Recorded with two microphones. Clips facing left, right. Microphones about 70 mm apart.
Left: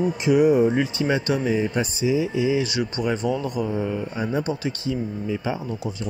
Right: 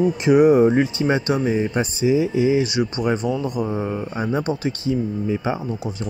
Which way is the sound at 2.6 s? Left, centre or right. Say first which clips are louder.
Right 3 dB; centre.